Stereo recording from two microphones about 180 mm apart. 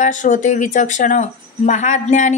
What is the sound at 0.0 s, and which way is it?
Speech, 45° left (ahead or behind).